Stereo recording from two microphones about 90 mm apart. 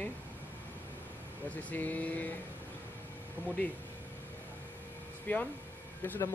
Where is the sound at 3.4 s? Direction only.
20° right (ahead or behind).